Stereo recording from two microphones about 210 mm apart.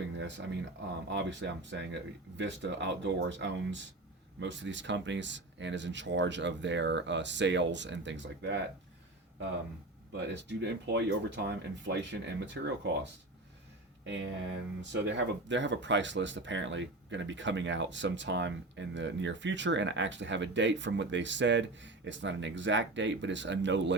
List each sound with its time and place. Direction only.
0.2 s speech: 60° right (ahead or behind)
10.3 s speech: 55° right (ahead or behind)
14.0 s speech: 60° right (ahead or behind)